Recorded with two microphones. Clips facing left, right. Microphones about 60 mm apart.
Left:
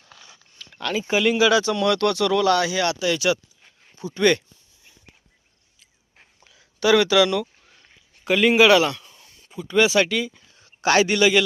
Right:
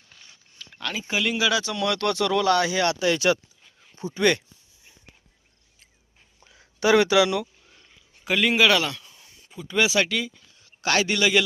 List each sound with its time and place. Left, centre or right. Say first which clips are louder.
0.7 s a sound: left 6 dB; centre
1.1 s speech: left 6 dB; centre
2.6 s speech: even; right
4.1 s speech: left 3 dB; centre
6.5 s speech: left 1 dB; right
8.2 s speech: left 4 dB; centre
10.8 s speech: left 5 dB; centre